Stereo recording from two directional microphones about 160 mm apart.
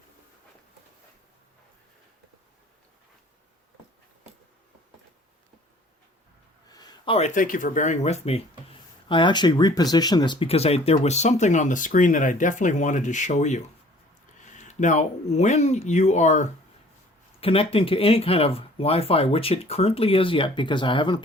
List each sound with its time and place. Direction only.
6.7 s a sound: 25° left (ahead or behind)
7.3 s speech: 55° left (ahead or behind)
17.4 s speech: 35° left (ahead or behind)